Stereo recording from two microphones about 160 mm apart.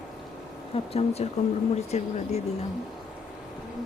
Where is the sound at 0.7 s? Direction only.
40° left (ahead or behind).